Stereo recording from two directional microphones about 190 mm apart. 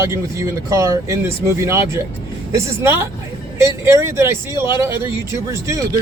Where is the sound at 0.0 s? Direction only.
15° right (ahead or behind).